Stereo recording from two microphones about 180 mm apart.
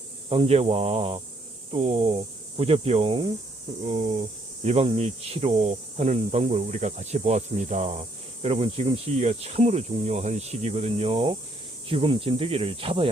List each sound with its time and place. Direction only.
0.3 s speech: 35° right (ahead or behind)